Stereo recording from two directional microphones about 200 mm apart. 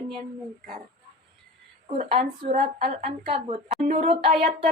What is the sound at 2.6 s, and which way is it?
Speech, 30° right (ahead or behind).